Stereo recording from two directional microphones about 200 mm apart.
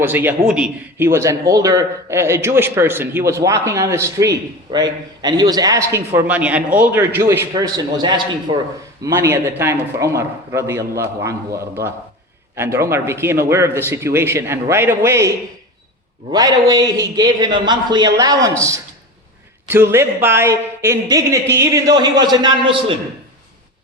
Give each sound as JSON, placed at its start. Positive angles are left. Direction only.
{"t": 0.0, "sound": "a man's voice", "side_deg": -10}
{"t": 16.3, "sound": "a man's voice", "side_deg": -20}